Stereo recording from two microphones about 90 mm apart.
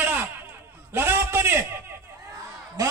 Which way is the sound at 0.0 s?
20° right (ahead or behind).